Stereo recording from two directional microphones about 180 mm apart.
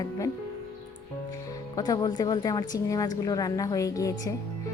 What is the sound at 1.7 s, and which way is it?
A woman's voice, 20° left (ahead or behind).